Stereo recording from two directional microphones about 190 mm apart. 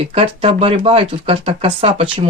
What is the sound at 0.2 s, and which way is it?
Speech, 30° right (ahead or behind).